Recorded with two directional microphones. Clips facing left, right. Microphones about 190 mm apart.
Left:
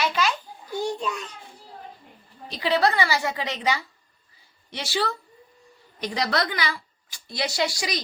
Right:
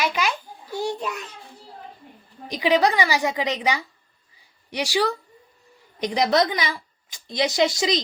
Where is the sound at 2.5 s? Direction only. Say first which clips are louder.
Right 3 dB; 15° right (ahead or behind).